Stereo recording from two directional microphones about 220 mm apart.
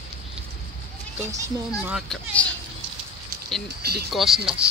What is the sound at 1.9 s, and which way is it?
Speech, centre (ahead or behind).